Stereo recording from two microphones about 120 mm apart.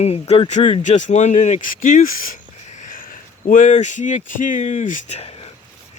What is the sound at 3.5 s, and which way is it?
Speech, 85° left.